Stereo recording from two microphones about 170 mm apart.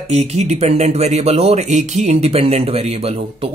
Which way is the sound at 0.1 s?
40° right (ahead or behind).